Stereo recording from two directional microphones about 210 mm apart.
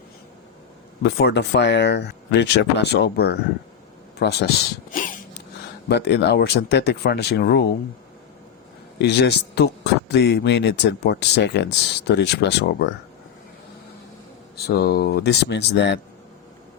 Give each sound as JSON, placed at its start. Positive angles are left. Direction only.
{"t": 1.0, "sound": "speech", "side_deg": 55}
{"t": 5.9, "sound": "speech", "side_deg": 55}
{"t": 9.0, "sound": "speech", "side_deg": 55}
{"t": 14.5, "sound": "speech", "side_deg": 50}